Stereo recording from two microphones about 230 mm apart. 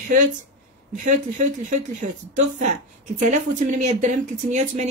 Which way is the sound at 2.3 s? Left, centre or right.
Right.